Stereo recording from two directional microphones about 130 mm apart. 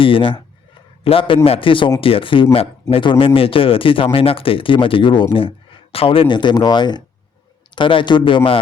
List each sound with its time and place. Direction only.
0.0 s a man's voice: 40° left (ahead or behind)